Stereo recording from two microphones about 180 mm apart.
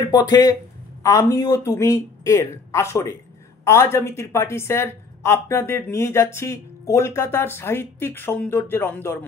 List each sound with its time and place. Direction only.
0.1 s a woman's voice: 20° left (ahead or behind)